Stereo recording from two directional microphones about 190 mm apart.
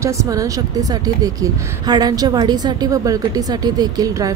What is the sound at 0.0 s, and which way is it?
A woman's voice, 15° right (ahead or behind).